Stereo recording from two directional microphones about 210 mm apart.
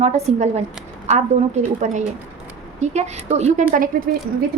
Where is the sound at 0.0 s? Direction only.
30° right (ahead or behind).